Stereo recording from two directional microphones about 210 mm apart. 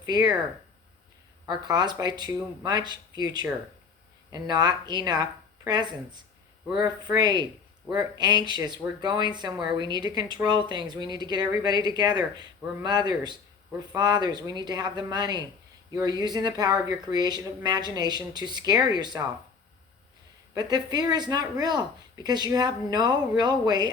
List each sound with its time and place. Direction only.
0.0 s speech: 20° right (ahead or behind)
1.5 s speech: 20° right (ahead or behind)
6.8 s speech: 20° right (ahead or behind)
20.5 s speech: 20° right (ahead or behind)